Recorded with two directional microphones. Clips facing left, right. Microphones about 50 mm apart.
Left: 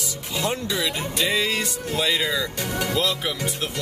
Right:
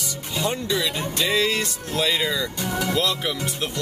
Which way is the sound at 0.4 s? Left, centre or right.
Centre.